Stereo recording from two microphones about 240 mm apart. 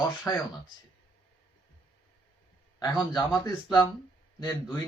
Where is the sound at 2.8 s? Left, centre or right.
Centre.